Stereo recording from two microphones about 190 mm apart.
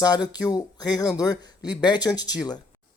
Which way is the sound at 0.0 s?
20° left (ahead or behind).